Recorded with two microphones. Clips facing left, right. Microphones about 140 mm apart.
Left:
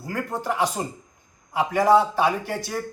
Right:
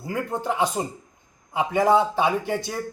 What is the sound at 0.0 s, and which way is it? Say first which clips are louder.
A man's voice: right 1 dB; 20° right (ahead or behind).